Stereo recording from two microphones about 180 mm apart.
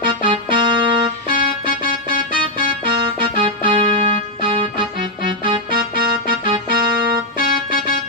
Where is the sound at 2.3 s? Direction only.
30° right (ahead or behind).